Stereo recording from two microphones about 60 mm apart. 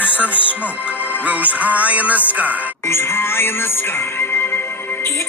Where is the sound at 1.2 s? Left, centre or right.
Right.